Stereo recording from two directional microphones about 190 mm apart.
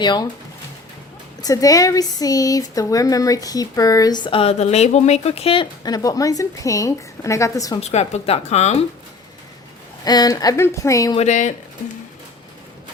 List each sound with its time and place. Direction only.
0.0 s speech: 20° left (ahead or behind)
1.4 s speech: 20° left (ahead or behind)
7.8 s speech: 35° left (ahead or behind)
10.0 s speech: 20° left (ahead or behind)
11.2 s speech: 40° left (ahead or behind)